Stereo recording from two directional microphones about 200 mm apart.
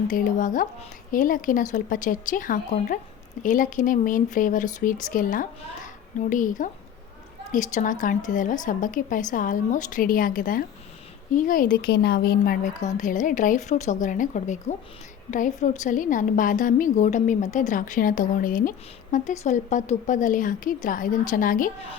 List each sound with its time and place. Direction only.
0.1 s a woman's voice: 40° left (ahead or behind)